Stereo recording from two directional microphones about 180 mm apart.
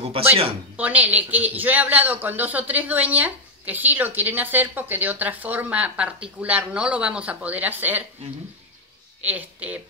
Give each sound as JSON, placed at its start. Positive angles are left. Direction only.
{"t": 0.0, "sound": "speech", "side_deg": -35}
{"t": 0.7, "sound": "a man's voice", "side_deg": -10}
{"t": 9.2, "sound": "speech", "side_deg": -10}